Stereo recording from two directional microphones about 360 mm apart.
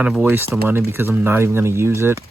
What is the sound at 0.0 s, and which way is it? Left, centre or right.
Speech, centre.